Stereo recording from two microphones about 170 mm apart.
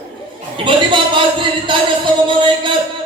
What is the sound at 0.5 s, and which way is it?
A man's voice, 30° right (ahead or behind).